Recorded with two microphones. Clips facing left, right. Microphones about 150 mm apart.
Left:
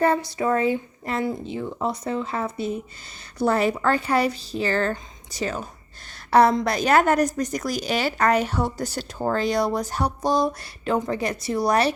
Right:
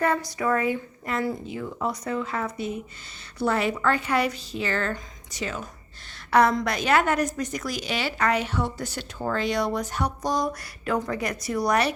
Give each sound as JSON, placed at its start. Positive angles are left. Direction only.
{"t": 0.0, "sound": "a woman's voice", "side_deg": 30}
{"t": 6.7, "sound": "a woman's voice", "side_deg": 40}